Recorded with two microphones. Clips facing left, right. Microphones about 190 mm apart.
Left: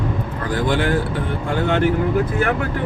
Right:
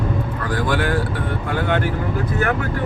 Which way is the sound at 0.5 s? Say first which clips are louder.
Left 2 dB; 25° left (ahead or behind).